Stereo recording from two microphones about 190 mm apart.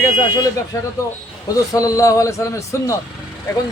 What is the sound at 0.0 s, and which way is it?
A man's voice, 20° left (ahead or behind).